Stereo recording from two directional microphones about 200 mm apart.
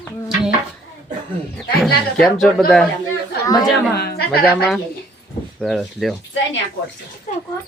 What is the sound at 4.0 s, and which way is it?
Speech, 50° left (ahead or behind).